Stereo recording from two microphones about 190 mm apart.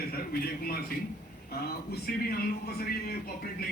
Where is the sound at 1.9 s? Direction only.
50° left (ahead or behind).